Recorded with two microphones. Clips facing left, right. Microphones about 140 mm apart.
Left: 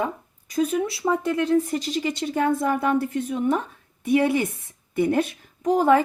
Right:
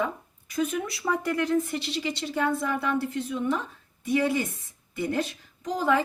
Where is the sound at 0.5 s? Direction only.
35° left (ahead or behind).